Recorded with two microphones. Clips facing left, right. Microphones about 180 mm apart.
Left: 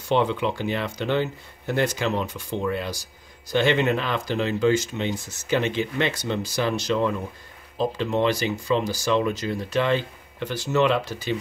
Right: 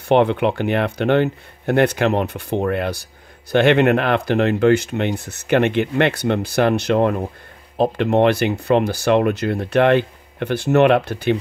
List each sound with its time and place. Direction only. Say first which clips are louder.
0.1 s speech: right 7 dB; 60° right (ahead or behind)